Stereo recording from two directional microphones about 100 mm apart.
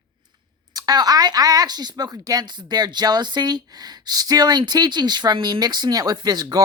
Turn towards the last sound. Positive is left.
turn(degrees=-45)  # may be behind; listen again after turning